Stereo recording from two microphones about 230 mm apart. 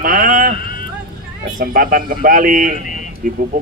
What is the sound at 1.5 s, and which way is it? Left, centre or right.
Speech, right.